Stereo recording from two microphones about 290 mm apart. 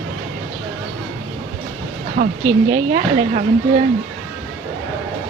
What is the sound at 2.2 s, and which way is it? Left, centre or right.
Speech, right.